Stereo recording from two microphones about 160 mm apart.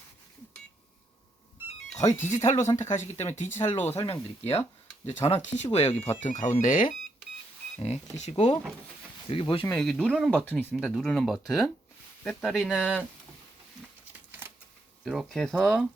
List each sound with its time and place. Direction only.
2.1 s speech: 15° left (ahead or behind)
5.2 s speech: 45° left (ahead or behind)
7.8 s speech: 40° left (ahead or behind)
9.7 s speech: centre (ahead or behind)
10.5 s speech: 10° left (ahead or behind)
10.8 s speech: centre (ahead or behind)
14.1 s a sound: 10° right (ahead or behind)
15.0 s speech: 5° right (ahead or behind)